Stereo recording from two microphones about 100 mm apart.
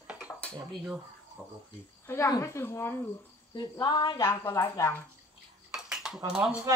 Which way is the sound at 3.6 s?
50° left (ahead or behind).